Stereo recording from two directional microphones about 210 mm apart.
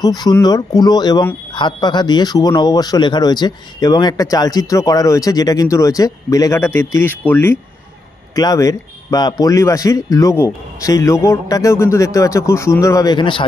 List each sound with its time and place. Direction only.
0.0 s speech: 20° left (ahead or behind)